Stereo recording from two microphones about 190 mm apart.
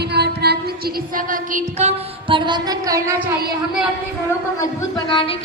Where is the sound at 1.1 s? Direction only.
45° right (ahead or behind); by 3.2 s 15° right (ahead or behind).